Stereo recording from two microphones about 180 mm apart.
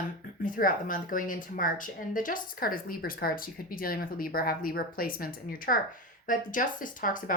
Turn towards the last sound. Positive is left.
turn(degrees=50)  # may be behind; listen again after turning